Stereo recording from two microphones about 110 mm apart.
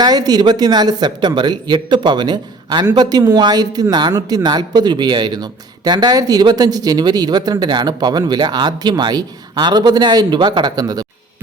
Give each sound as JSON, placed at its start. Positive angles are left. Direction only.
{"t": 0.0, "sound": "speech", "side_deg": -35}